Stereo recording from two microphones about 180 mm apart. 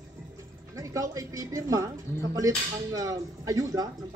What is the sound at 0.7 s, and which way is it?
Speech, 15° right (ahead or behind).